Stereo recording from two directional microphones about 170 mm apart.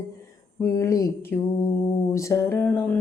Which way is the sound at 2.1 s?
15° left (ahead or behind).